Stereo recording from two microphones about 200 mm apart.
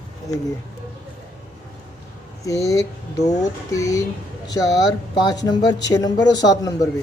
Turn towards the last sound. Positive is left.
turn(degrees=20)  # may be behind; listen again after turning